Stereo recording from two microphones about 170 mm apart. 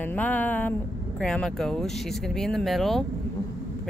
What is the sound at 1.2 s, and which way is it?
Speech, 5° left (ahead or behind).